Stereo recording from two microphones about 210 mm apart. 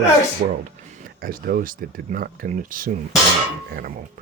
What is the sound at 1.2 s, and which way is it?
Speech, 45° right (ahead or behind).